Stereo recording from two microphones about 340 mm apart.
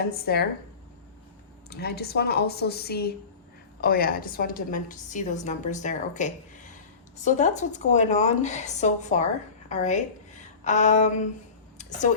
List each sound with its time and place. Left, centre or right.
0.0 s a woman's voice: left
1.7 s a woman's voice: left